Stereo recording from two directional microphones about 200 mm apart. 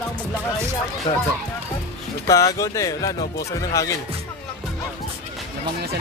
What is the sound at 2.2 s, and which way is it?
Speech, 15° left (ahead or behind).